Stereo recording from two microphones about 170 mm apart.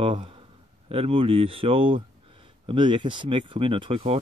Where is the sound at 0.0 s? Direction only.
30° right (ahead or behind).